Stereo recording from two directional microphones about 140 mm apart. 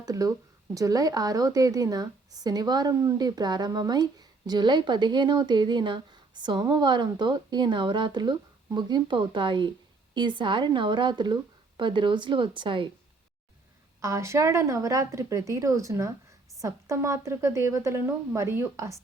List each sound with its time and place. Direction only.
0.0 s speech: 25° right (ahead or behind)
14.0 s a woman's voice: 20° right (ahead or behind)